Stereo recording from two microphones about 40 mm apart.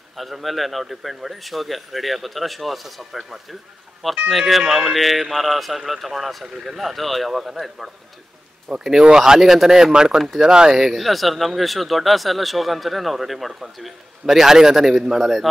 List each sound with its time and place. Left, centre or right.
0.2 s a man's voice: centre
10.8 s speech: centre